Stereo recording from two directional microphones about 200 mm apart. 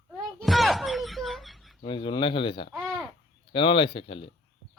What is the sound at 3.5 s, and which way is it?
Speech, 25° left (ahead or behind).